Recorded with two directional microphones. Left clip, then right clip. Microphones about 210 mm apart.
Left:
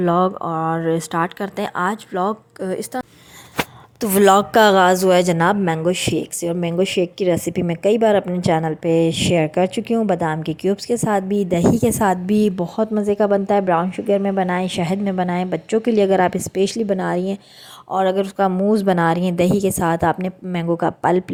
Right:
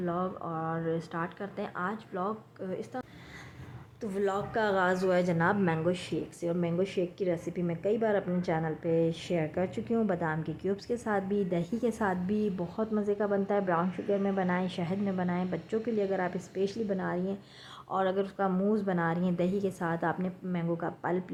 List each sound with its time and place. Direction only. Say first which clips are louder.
0.0 s a woman's voice: left 16 dB; 40° left (ahead or behind)
4.0 s a woman's voice: left 18 dB; 50° left (ahead or behind)